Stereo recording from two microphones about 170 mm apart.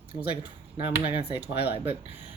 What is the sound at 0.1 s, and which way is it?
Speech, 65° left (ahead or behind).